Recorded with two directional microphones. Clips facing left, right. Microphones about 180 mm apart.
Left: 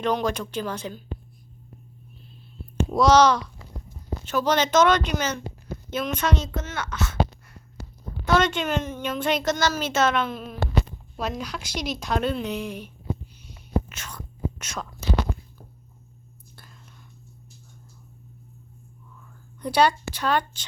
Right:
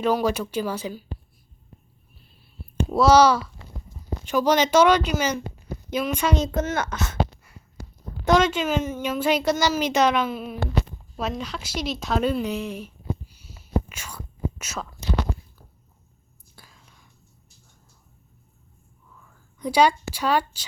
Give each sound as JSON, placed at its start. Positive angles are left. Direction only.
{"t": 0.0, "sound": "a woman's voice", "side_deg": -5}
{"t": 2.9, "sound": "a woman's voice", "side_deg": -5}
{"t": 6.5, "sound": "a child's voice", "side_deg": -45}
{"t": 8.3, "sound": "a woman's voice", "side_deg": -5}
{"t": 13.3, "sound": "whispering", "side_deg": -10}
{"t": 16.6, "sound": "whispering", "side_deg": -10}
{"t": 19.1, "sound": "speech", "side_deg": -10}